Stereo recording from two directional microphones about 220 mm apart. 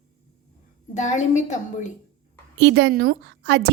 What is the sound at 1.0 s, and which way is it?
Speech, 35° left (ahead or behind).